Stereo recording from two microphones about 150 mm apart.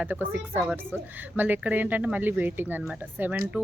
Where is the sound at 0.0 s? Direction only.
10° right (ahead or behind).